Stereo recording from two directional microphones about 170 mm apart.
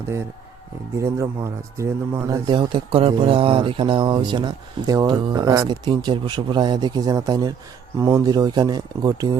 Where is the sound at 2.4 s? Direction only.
25° right (ahead or behind).